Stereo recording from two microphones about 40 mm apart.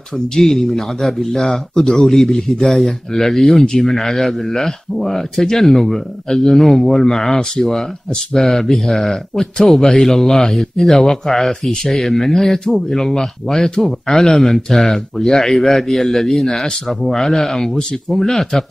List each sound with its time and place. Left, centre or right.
0.4 s speech: centre